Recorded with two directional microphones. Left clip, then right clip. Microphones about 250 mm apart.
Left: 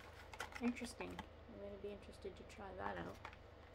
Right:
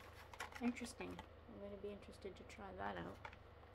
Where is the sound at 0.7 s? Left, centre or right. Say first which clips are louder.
Left 1 dB; centre.